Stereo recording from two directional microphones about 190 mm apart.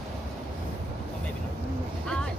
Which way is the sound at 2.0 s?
5° left (ahead or behind).